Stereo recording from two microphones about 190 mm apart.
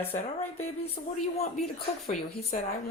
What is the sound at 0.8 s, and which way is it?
Speech, 30° left (ahead or behind).